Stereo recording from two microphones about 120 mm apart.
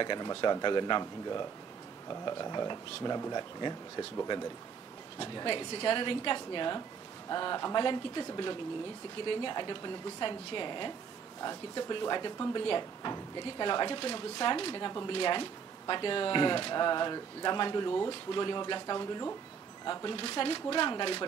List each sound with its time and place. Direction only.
0.0 s speech: 40° left (ahead or behind)
5.2 s a woman's voice: 40° left (ahead or behind)